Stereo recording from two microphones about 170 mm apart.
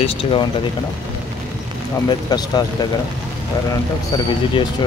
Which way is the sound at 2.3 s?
25° left (ahead or behind).